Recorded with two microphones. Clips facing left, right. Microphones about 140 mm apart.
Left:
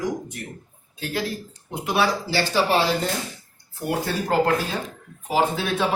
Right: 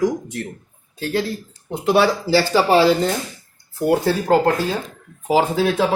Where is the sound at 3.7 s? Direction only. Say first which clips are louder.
Right 8 dB; 90° right.